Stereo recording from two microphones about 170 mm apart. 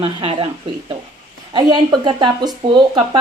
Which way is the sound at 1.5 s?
25° right (ahead or behind).